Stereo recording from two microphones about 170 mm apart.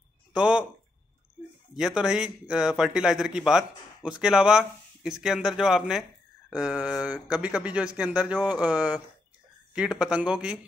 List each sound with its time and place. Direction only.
0.3 s speech: 5° right (ahead or behind)
1.8 s speech: 5° right (ahead or behind)